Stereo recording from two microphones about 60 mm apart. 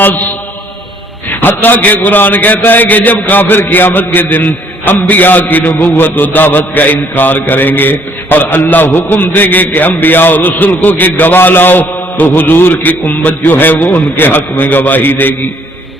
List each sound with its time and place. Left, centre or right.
0.0 s mantra: left
1.3 s a man's voice: left